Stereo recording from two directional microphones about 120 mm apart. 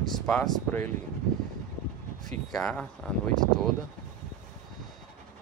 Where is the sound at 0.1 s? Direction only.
5° left (ahead or behind).